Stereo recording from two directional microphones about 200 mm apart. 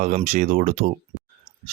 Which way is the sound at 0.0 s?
35° right (ahead or behind).